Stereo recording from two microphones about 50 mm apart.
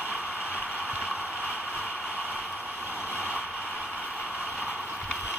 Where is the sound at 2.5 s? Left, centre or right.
Right.